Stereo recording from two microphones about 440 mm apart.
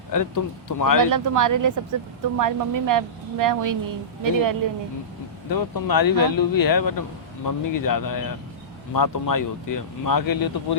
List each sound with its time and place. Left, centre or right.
0.1 s speech: left
1.1 s a woman's voice: right
5.5 s speech: left